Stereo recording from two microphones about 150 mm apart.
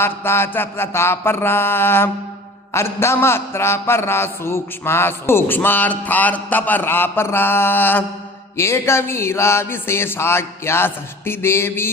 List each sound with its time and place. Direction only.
0.0 s a man's voice: 15° left (ahead or behind)